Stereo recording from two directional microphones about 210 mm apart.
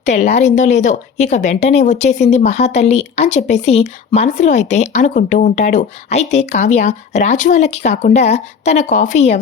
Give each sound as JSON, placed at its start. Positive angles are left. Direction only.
{"t": 0.0, "sound": "a woman's voice", "side_deg": 30}